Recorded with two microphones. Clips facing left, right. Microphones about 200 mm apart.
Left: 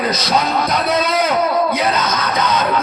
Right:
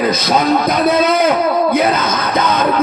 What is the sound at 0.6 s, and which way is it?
Music, 55° right (ahead or behind).